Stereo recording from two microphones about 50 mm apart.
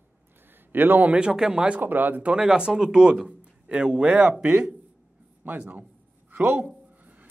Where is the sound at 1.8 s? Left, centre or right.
Right.